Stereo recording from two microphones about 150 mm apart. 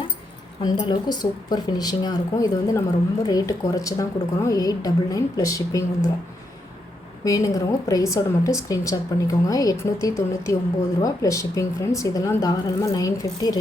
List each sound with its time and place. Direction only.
0.6 s a woman's voice: 30° left (ahead or behind)
7.3 s a woman's voice: 20° left (ahead or behind)